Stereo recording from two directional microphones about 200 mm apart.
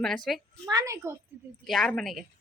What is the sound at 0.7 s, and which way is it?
Speech, 15° right (ahead or behind).